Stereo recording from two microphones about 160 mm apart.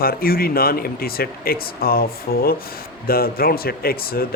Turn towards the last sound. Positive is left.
turn(degrees=70)  # may be behind; listen again after turning